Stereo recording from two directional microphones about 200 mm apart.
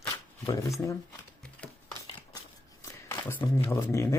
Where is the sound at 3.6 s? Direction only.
15° left (ahead or behind).